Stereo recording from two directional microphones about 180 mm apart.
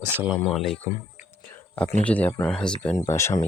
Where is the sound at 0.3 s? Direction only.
Centre (ahead or behind).